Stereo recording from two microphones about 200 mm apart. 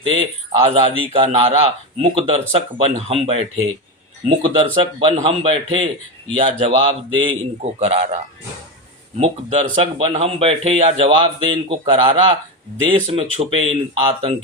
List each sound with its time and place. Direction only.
0.0 s speech: 30° right (ahead or behind)